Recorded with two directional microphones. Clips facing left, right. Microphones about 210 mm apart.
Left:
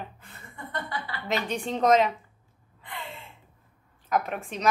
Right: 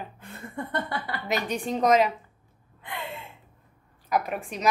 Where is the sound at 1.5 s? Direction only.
10° right (ahead or behind).